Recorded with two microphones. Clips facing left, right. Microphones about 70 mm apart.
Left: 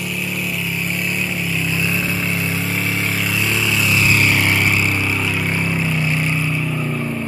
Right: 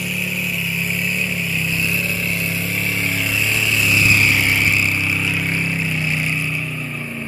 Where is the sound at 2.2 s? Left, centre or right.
Left.